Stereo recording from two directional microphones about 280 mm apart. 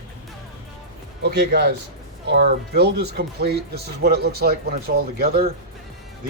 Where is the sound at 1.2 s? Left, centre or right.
Right.